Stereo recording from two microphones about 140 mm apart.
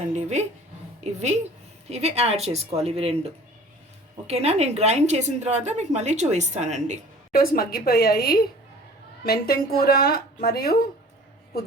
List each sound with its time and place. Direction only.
0.2 s a woman's voice: 55° right (ahead or behind)
4.3 s a woman's voice: 50° right (ahead or behind)
7.3 s a woman's voice: 90° left